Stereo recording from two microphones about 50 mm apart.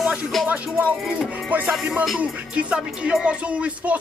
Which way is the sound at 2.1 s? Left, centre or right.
Right.